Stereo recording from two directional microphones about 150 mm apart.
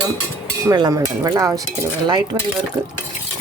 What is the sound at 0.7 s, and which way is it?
Speech, 20° right (ahead or behind).